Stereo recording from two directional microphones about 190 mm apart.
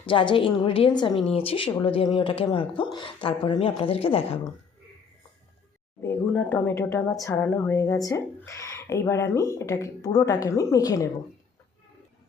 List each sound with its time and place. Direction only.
0.0 s speech: 25° left (ahead or behind)
6.0 s speech: 10° left (ahead or behind)